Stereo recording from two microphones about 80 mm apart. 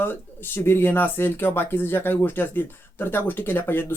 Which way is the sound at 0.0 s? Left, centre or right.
Left.